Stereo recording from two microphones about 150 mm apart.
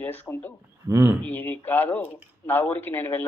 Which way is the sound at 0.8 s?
20° right (ahead or behind).